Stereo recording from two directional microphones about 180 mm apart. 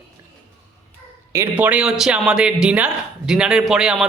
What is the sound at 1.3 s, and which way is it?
Speech, 10° right (ahead or behind).